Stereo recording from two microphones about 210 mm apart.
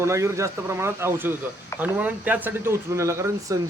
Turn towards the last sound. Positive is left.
turn(degrees=-15)  # may be behind; listen again after turning